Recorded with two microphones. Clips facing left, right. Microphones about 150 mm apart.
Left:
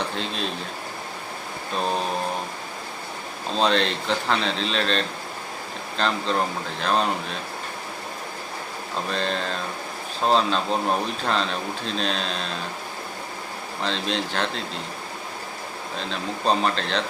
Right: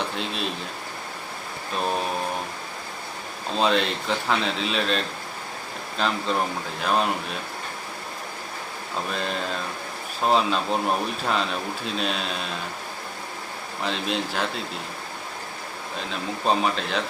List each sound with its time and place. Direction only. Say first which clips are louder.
0.0 s speech: even; 5° right (ahead or behind)
3.5 s speech: left 1 dB; 5° right (ahead or behind)
9.0 s speech: left 2 dB; 5° right (ahead or behind)
13.8 s speech: even; 5° right (ahead or behind)
16.0 s speech: left 1 dB; 5° right (ahead or behind)